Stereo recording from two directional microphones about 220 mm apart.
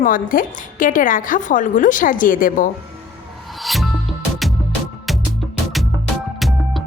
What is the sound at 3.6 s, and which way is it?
Music, centre (ahead or behind).